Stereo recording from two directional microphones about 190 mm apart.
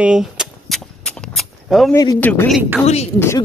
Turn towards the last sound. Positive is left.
turn(degrees=35)  # may be behind; listen again after turning